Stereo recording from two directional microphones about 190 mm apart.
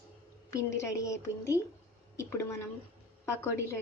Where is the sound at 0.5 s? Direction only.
15° left (ahead or behind).